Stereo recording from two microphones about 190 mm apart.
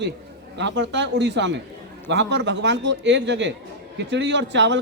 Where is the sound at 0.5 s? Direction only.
70° right (ahead or behind).